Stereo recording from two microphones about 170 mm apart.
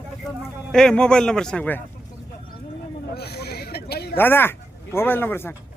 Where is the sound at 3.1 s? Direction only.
70° left (ahead or behind).